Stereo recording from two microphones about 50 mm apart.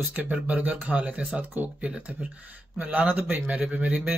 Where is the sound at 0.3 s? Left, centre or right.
Right.